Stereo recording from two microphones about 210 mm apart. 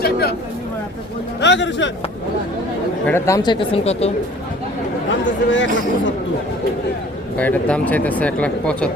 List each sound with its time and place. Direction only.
0.0 s speech: 50° left (ahead or behind)
1.4 s speech: 60° left (ahead or behind)
3.1 s speech: 15° left (ahead or behind)
5.0 s speech: 60° left (ahead or behind)
7.3 s speech: 5° left (ahead or behind)